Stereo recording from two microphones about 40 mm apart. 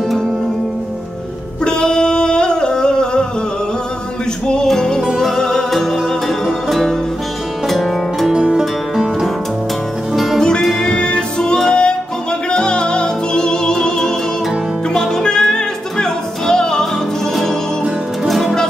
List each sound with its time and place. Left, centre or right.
1.6 s a sound: left
4.6 s music: centre
8.3 s music: centre
8.9 s music: centre
10.8 s music: left
18.2 s music: centre